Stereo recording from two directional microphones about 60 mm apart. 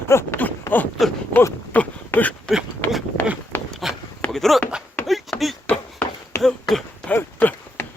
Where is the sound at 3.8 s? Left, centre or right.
Centre.